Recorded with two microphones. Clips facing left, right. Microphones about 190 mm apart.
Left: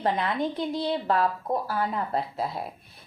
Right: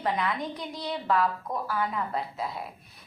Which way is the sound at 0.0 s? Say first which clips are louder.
Left 3 dB; 30° left (ahead or behind).